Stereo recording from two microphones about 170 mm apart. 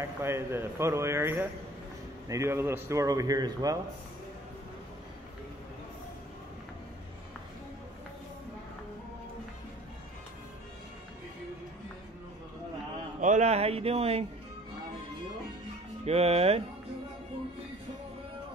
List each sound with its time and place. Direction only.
0.0 s a man's voice: 15° right (ahead or behind)
13.2 s speech: 45° right (ahead or behind)
16.1 s speech: 35° right (ahead or behind)